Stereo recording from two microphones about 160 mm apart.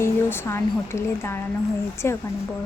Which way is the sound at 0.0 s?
15° left (ahead or behind).